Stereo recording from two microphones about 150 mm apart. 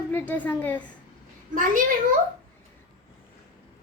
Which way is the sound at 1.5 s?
60° right (ahead or behind).